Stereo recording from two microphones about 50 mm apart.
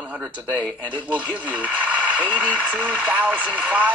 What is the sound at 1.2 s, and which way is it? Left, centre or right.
Speech, right.